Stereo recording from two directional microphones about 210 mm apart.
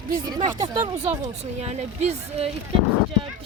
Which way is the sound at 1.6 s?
30° right (ahead or behind).